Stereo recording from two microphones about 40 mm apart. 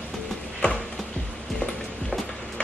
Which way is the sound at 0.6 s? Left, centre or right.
Left.